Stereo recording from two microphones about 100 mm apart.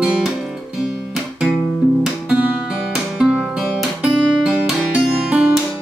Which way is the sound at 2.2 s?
10° right (ahead or behind).